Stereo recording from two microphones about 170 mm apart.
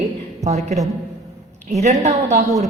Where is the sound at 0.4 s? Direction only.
40° right (ahead or behind).